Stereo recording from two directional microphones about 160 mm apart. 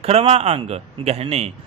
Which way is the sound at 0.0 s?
40° right (ahead or behind).